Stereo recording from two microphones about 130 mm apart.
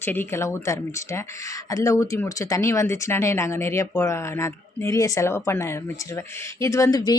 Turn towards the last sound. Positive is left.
turn(degrees=25)  # may be behind; listen again after turning